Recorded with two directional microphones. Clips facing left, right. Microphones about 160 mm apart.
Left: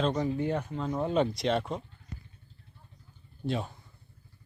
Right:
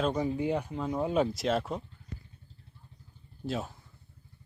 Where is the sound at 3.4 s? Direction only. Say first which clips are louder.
Left 2 dB; centre (ahead or behind).